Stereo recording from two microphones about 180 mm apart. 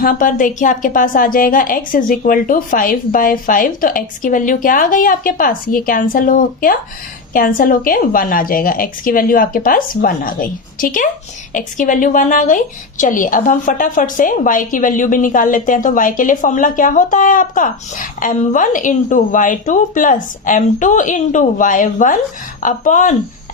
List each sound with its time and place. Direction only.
0.0 s a woman's voice: 50° left (ahead or behind)